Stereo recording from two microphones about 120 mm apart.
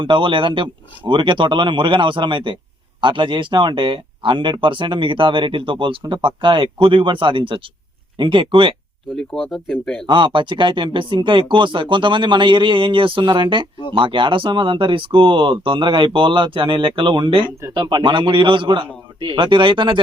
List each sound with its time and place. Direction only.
0.0 s speech: 45° right (ahead or behind)
9.1 s speech: 5° left (ahead or behind)
10.1 s speech: 40° right (ahead or behind)